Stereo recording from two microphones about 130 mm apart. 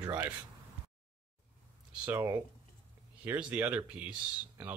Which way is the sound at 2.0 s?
15° right (ahead or behind).